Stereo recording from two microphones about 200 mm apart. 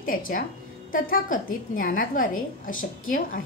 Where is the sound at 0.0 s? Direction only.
45° left (ahead or behind).